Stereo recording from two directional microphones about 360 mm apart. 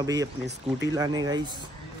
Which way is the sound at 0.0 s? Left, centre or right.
Centre.